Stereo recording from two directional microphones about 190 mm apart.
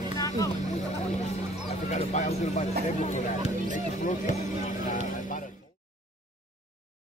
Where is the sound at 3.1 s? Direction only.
40° left (ahead or behind).